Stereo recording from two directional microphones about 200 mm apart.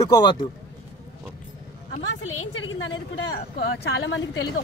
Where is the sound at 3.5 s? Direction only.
60° left (ahead or behind).